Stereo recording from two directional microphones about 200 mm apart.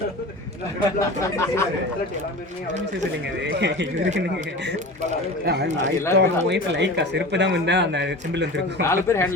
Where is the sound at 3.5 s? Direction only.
60° right (ahead or behind).